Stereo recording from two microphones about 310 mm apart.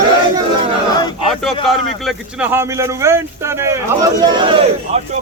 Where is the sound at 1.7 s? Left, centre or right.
Centre.